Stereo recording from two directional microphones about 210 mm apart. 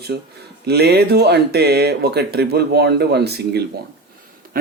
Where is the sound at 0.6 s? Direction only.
50° right (ahead or behind).